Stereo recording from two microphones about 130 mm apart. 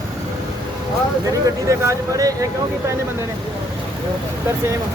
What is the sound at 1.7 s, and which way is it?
Speech, 25° right (ahead or behind).